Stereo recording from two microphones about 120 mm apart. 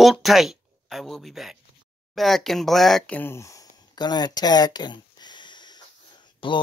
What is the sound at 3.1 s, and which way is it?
Speech, 20° left (ahead or behind).